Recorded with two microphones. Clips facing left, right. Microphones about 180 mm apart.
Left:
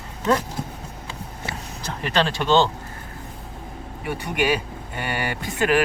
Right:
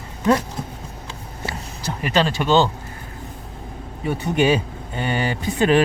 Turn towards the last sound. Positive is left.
turn(degrees=-25)  # may be behind; listen again after turning